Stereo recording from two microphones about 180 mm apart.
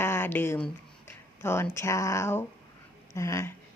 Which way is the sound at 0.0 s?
10° left (ahead or behind).